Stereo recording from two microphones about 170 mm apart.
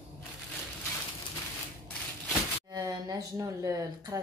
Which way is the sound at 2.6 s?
20° right (ahead or behind).